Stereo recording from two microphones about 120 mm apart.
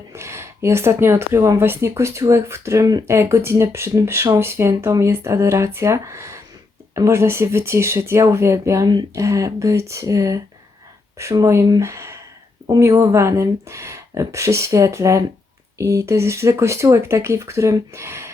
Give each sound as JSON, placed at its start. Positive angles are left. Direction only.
{"t": 0.1, "sound": "a woman's voice", "side_deg": -20}